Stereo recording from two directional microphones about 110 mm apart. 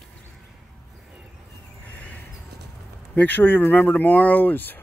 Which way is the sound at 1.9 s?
10° left (ahead or behind).